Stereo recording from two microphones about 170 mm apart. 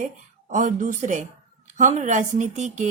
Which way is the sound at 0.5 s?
50° right (ahead or behind).